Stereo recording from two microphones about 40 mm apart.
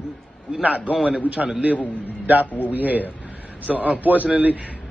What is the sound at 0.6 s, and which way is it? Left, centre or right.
Speech, right.